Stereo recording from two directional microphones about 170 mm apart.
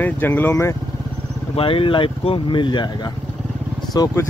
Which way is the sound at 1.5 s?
30° left (ahead or behind).